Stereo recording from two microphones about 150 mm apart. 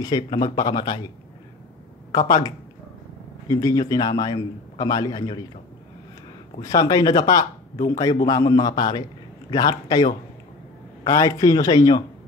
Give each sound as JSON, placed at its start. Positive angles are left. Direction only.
{"t": 0.0, "sound": "a man's voice", "side_deg": 30}
{"t": 2.1, "sound": "a man's voice", "side_deg": 25}
{"t": 6.6, "sound": "a man's voice", "side_deg": 25}